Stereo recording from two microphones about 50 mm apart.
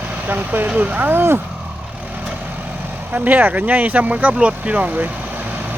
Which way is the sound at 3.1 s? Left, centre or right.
Right.